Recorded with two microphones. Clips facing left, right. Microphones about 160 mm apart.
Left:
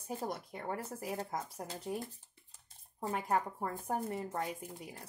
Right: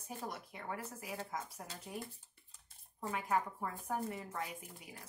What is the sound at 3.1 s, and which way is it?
Speech, 40° left (ahead or behind).